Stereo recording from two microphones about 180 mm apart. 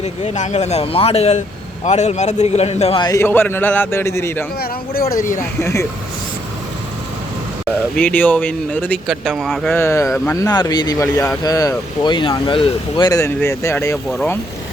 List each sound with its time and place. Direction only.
0.0 s speech: 40° left (ahead or behind)
3.0 s speech: 15° left (ahead or behind)
4.6 s speech: 55° left (ahead or behind)
5.4 s speech: 15° left (ahead or behind)
7.9 s speech: 10° left (ahead or behind)
9.7 s speech: 15° left (ahead or behind)